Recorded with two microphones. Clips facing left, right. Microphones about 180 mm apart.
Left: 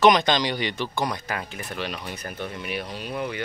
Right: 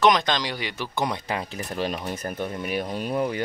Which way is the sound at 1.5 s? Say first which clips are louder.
Right 4 dB; 40° right (ahead or behind).